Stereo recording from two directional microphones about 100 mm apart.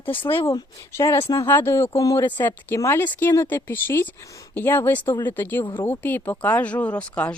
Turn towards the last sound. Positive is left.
turn(degrees=15)  # may be behind; listen again after turning